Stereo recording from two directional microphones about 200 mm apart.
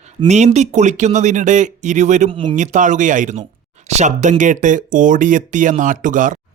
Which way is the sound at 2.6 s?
40° right (ahead or behind).